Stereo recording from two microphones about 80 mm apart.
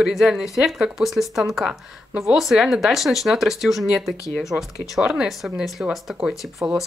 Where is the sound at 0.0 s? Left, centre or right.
Centre.